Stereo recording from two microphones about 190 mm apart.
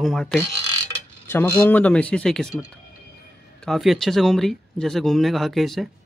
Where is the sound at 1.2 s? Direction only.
10° left (ahead or behind).